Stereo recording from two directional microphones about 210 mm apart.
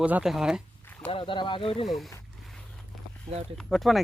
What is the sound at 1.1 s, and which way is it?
Speech, 25° left (ahead or behind).